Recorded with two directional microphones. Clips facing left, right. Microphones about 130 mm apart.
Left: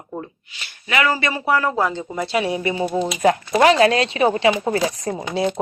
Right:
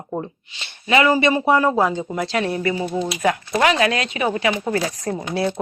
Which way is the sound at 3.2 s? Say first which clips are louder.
Left 4 dB; 35° left (ahead or behind).